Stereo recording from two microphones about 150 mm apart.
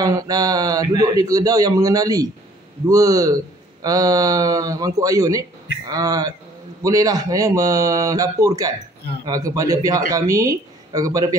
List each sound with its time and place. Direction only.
0.0 s a man's voice: 25° right (ahead or behind)